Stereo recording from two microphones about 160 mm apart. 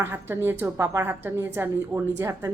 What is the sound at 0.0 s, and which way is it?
Speech, 15° right (ahead or behind).